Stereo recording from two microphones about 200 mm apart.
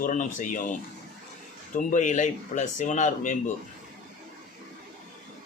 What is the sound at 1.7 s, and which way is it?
Speech, 40° left (ahead or behind).